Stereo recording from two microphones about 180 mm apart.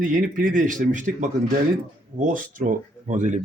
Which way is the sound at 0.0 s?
50° right (ahead or behind).